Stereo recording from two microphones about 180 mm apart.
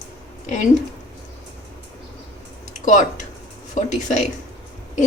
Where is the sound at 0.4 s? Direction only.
40° left (ahead or behind).